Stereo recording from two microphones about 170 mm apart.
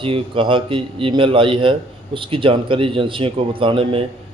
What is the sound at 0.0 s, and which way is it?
A man's voice, 30° right (ahead or behind).